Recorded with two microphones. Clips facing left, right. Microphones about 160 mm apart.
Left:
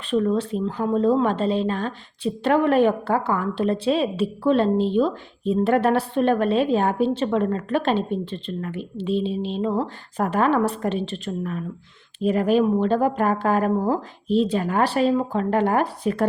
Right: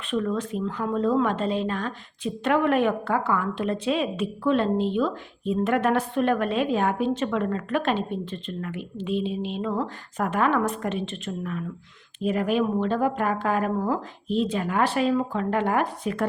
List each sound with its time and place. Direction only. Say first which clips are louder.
0.1 s a woman's voice: left 5 dB; 30° left (ahead or behind)